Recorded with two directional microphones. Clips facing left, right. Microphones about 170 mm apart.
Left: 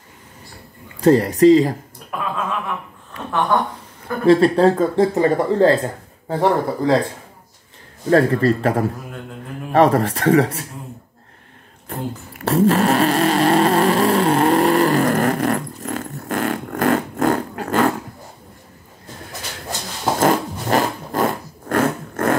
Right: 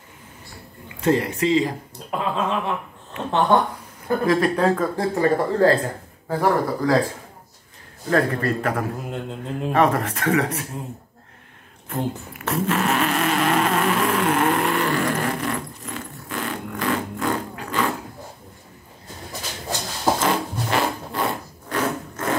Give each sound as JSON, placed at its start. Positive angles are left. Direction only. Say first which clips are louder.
{"t": 1.0, "sound": "speech", "louder": "left 8 dB", "side_deg": 40}
{"t": 2.0, "sound": "a sound", "louder": "right 1 dB", "side_deg": -25}
{"t": 3.1, "sound": "speech", "louder": "right 1 dB", "side_deg": -25}
{"t": 4.3, "sound": "speech", "louder": "left 8 dB", "side_deg": 30}
{"t": 8.1, "sound": "speech", "louder": "left 6 dB", "side_deg": 30}
{"t": 9.1, "sound": "mantra", "louder": "right 3 dB", "side_deg": -25}
{"t": 9.7, "sound": "speech", "louder": "left 5 dB", "side_deg": 35}
{"t": 11.9, "sound": "a sound", "louder": "right 1 dB", "side_deg": 35}
{"t": 20.2, "sound": "zipper", "louder": "left 5 dB", "side_deg": 45}